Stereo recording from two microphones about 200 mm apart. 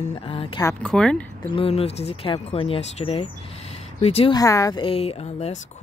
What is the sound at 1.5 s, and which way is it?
Speech, 30° left (ahead or behind).